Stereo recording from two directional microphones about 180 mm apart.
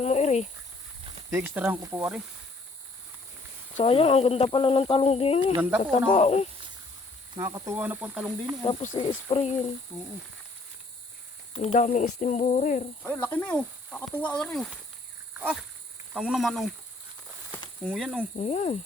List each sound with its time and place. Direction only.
0.0 s a sound: 40° left (ahead or behind)
1.3 s speech: 10° right (ahead or behind)
3.8 s speech: 30° left (ahead or behind)
5.5 s speech: 10° right (ahead or behind)
6.1 s speech: 35° left (ahead or behind)
7.3 s speech: 20° right (ahead or behind)
9.0 s speech: 30° left (ahead or behind)
11.5 s speech: 35° left (ahead or behind)
11.9 s a sound: 45° left (ahead or behind)
13.0 s speech: 10° left (ahead or behind)
15.4 s speech: 10° right (ahead or behind)
17.8 s speech: centre (ahead or behind)
18.3 s speech: 40° left (ahead or behind)